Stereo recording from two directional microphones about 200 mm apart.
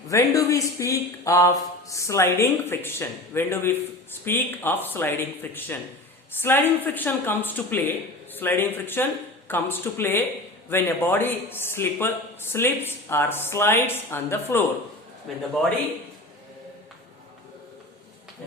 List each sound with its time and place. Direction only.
0.1 s a man's voice: 15° left (ahead or behind)
15.3 s speech: centre (ahead or behind)